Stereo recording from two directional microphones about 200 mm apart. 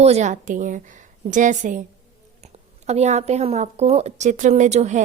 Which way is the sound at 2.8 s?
35° right (ahead or behind).